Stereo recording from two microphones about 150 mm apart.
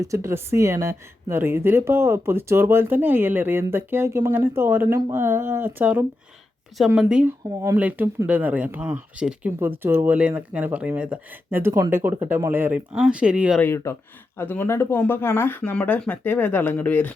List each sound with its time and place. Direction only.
0.0 s speech: 20° right (ahead or behind)
6.7 s speech: centre (ahead or behind)
13.6 s speech: 15° left (ahead or behind)